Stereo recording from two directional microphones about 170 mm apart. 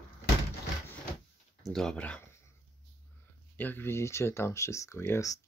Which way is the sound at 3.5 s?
10° left (ahead or behind).